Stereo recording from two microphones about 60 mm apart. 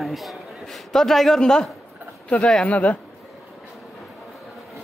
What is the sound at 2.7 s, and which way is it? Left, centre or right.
Speech, left.